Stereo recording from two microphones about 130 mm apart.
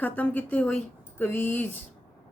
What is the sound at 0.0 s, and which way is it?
A woman's voice, 10° left (ahead or behind).